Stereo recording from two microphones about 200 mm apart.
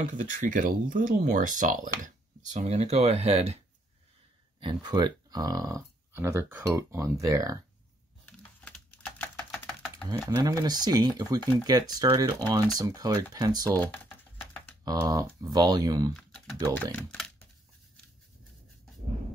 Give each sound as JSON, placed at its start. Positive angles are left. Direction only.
{"t": 0.2, "sound": "speech", "side_deg": -40}
{"t": 4.6, "sound": "speech", "side_deg": -20}
{"t": 8.3, "sound": "typing", "side_deg": 5}
{"t": 10.0, "sound": "speech", "side_deg": -15}
{"t": 13.7, "sound": "speech", "side_deg": 10}
{"t": 14.4, "sound": "typing", "side_deg": 5}
{"t": 14.9, "sound": "speech", "side_deg": -15}
{"t": 16.1, "sound": "typing", "side_deg": 0}
{"t": 16.7, "sound": "speech", "side_deg": 10}